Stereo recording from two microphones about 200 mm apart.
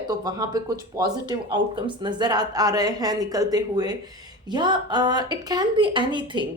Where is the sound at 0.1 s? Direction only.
20° right (ahead or behind).